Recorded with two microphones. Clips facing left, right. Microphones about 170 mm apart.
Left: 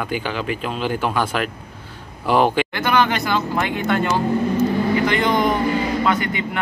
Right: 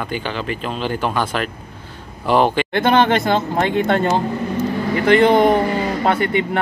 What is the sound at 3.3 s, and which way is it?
Speech, 45° right (ahead or behind).